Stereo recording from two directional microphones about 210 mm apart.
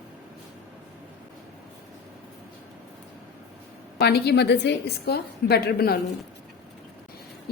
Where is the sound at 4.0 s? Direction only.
50° left (ahead or behind).